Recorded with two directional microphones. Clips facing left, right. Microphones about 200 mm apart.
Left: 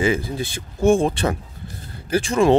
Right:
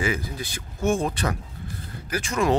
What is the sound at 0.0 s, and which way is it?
Speech, 25° left (ahead or behind).